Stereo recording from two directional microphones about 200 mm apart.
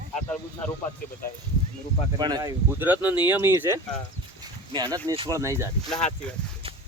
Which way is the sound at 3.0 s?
20° left (ahead or behind).